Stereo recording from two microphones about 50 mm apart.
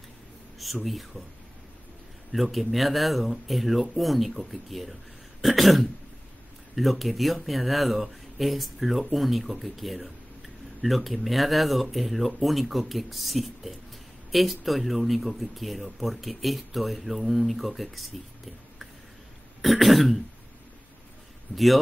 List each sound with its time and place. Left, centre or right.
0.6 s speech: centre
2.3 s speech: centre
19.6 s speech: centre
21.5 s a man's voice: left